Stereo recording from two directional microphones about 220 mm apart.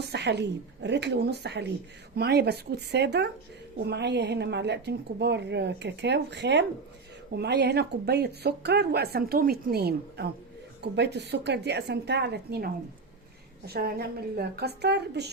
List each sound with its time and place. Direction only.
0.0 s speech: 50° right (ahead or behind)